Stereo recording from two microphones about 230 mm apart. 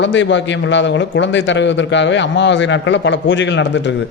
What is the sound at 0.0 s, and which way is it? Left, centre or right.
A man's voice, left.